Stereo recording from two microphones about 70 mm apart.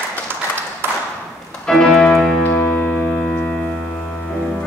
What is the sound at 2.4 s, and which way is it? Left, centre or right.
Music, left.